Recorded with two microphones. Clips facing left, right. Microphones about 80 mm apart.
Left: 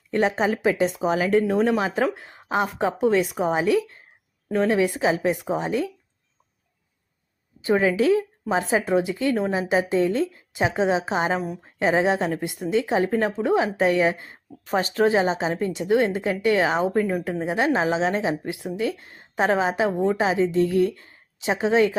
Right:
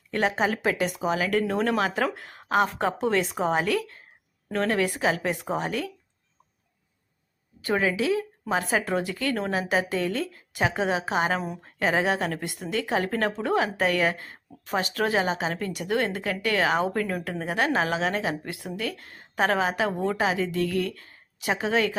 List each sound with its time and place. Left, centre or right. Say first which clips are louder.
0.1 s speech: left 3 dB; left
1.4 s a woman's voice: left 4 dB; centre
7.8 s speech: left 5 dB; left
8.4 s speech: left 3 dB; centre
11.3 s a woman's voice: left 3 dB; centre
11.8 s speech: left 4 dB; left
14.7 s speech: left 5 dB; left